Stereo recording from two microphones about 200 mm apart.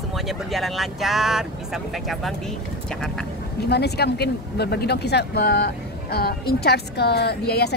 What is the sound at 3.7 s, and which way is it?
Speech, 55° left (ahead or behind).